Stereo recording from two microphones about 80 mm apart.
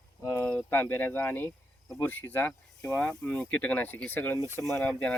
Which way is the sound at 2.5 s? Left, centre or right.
Centre.